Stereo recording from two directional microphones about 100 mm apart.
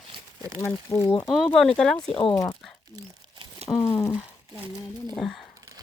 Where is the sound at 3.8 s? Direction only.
25° left (ahead or behind).